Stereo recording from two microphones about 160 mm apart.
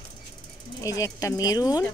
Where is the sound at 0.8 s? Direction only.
20° left (ahead or behind).